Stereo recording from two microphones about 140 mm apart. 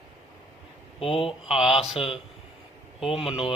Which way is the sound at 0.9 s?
40° left (ahead or behind).